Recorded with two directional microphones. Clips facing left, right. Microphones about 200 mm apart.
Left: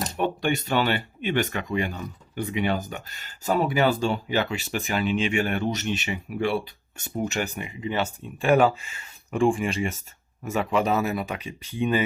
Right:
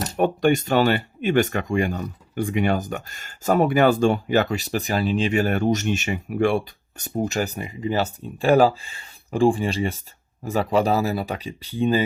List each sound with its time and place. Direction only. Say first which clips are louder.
0.2 s speech: right 7 dB; 45° right (ahead or behind)